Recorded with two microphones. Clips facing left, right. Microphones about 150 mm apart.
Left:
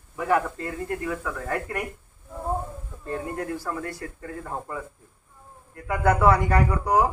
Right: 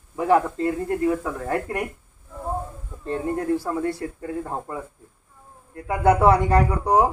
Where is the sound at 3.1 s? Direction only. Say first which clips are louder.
Right 6 dB; 25° right (ahead or behind).